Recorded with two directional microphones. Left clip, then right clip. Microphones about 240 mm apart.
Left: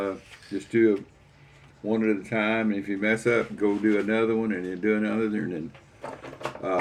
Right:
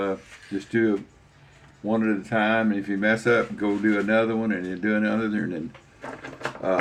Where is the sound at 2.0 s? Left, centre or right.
Right.